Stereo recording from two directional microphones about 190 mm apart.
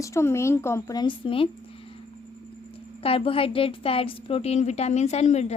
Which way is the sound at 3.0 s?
30° left (ahead or behind).